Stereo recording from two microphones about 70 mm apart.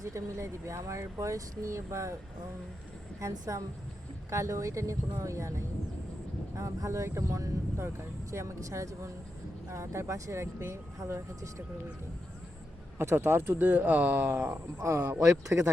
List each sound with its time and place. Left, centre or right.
0.0 s speech: right
3.2 s speech: right
13.0 s speech: right